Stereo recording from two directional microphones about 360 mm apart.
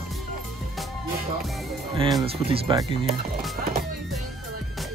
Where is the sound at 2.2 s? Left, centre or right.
Centre.